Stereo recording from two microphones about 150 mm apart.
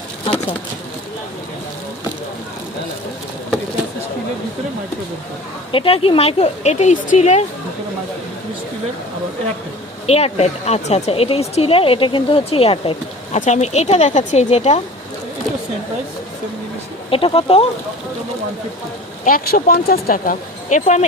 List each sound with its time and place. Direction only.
5.7 s speech: 40° left (ahead or behind)
10.1 s speech: 45° left (ahead or behind)
13.4 s speech: 50° left (ahead or behind)
17.1 s speech: 35° left (ahead or behind)
19.2 s speech: 70° left (ahead or behind); by 21.1 s 50° left (ahead or behind)